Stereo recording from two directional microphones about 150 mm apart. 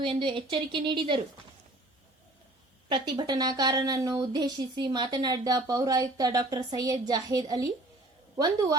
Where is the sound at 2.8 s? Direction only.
30° right (ahead or behind).